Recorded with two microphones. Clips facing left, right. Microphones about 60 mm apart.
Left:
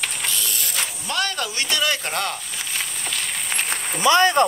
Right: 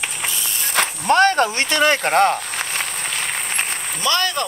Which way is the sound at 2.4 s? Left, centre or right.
Right.